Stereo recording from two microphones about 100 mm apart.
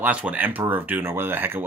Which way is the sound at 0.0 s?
15° right (ahead or behind).